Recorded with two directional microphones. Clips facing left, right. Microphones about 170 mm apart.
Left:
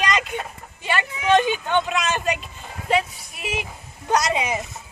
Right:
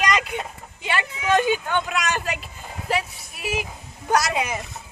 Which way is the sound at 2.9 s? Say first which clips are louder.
Left 4 dB; centre (ahead or behind).